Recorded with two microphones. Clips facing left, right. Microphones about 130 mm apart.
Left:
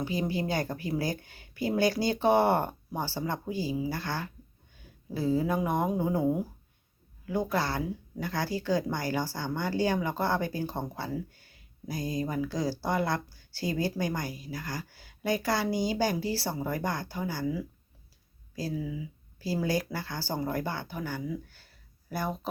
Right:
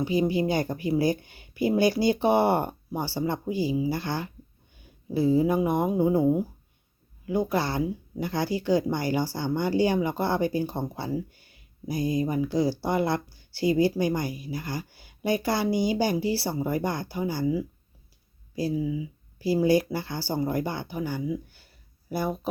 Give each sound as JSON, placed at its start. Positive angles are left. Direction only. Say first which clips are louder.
{"t": 0.0, "sound": "speech", "louder": "right 6 dB", "side_deg": -15}